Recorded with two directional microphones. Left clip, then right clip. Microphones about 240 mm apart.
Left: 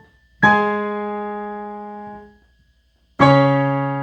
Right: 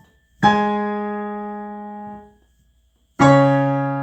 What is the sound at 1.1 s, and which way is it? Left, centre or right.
Music, centre.